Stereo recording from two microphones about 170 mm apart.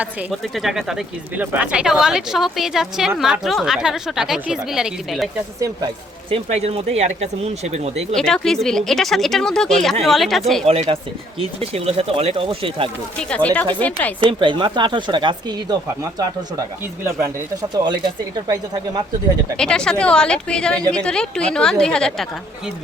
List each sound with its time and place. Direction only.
0.0 s speech: 5° right (ahead or behind)
5.5 s speech: 20° right (ahead or behind)
6.3 s speech: 35° right (ahead or behind)
8.1 s speech: 5° left (ahead or behind)
10.7 s speech: 35° right (ahead or behind)
13.3 s speech: 10° left (ahead or behind)
14.2 s speech: 30° right (ahead or behind)
17.0 s speech: 15° right (ahead or behind)
18.4 s speech: 20° right (ahead or behind)
19.5 s speech: 5° left (ahead or behind)